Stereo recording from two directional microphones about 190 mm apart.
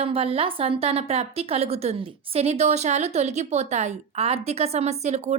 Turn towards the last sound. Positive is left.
turn(degrees=-35)  # may be behind; listen again after turning